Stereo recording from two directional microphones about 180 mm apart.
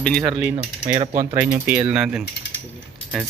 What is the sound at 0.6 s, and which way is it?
Typing, 40° right (ahead or behind).